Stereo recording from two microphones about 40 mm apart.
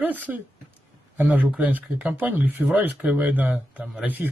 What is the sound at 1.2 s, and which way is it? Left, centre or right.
Speech, right.